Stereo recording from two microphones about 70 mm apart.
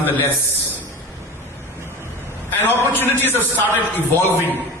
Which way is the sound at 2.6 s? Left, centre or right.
Left.